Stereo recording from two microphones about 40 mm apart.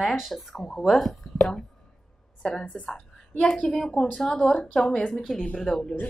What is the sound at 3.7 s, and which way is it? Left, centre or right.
A woman's voice, centre.